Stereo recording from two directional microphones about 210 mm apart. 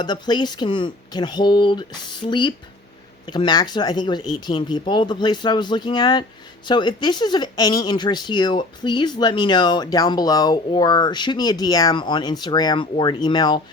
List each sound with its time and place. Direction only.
0.0 s speech: 20° left (ahead or behind)